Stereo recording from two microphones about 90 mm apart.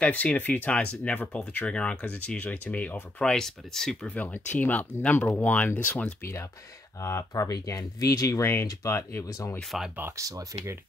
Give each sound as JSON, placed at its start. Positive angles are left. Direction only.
{"t": 0.0, "sound": "speech", "side_deg": 15}
{"t": 6.2, "sound": "speech", "side_deg": 30}
{"t": 9.6, "sound": "speech", "side_deg": 0}
{"t": 9.9, "sound": "speech", "side_deg": -30}